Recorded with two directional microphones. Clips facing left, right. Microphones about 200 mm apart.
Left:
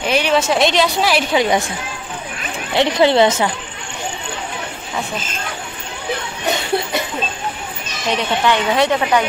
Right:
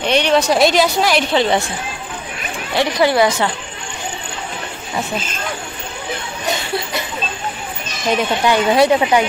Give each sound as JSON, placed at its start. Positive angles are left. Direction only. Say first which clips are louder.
{"t": 0.0, "sound": "a woman's voice", "louder": "right 2 dB", "side_deg": 5}
{"t": 2.7, "sound": "speech", "louder": "left 2 dB", "side_deg": 20}
{"t": 8.2, "sound": "a woman's voice", "louder": "right 1 dB", "side_deg": -10}